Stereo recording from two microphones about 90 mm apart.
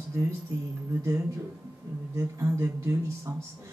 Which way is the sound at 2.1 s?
30° right (ahead or behind).